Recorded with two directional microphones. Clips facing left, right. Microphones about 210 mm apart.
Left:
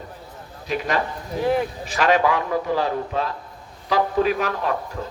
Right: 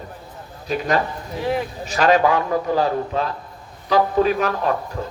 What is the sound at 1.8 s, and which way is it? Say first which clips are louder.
Speech: right 6 dB; 40° right (ahead or behind).